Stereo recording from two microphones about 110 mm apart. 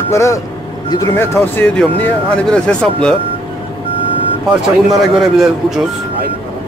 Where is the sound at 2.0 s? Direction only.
10° left (ahead or behind).